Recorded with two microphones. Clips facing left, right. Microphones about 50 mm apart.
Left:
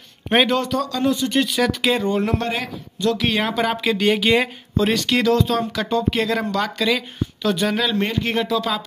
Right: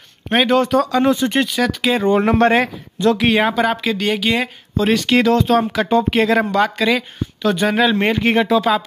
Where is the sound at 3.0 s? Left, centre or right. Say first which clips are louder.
Right 5 dB; right.